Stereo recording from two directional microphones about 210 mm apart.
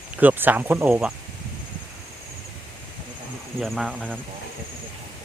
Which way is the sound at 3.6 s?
Centre (ahead or behind).